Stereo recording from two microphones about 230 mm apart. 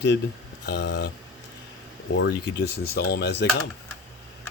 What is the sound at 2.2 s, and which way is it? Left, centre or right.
Speech, left.